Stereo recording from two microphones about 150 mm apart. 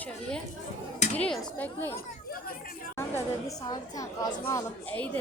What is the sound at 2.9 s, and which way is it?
A woman's voice, 20° left (ahead or behind).